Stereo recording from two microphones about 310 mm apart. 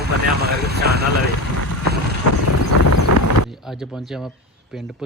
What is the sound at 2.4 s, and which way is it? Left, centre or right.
Vehicle, left.